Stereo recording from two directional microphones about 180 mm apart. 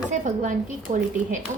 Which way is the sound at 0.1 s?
45° right (ahead or behind).